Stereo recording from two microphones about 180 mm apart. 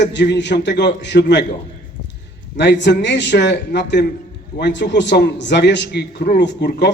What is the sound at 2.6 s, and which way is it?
A man's voice, 75° left (ahead or behind).